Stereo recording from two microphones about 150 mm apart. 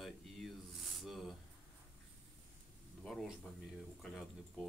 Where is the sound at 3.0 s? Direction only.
5° left (ahead or behind).